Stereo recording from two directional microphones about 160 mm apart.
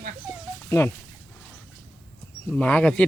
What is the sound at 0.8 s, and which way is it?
Speech, 20° left (ahead or behind).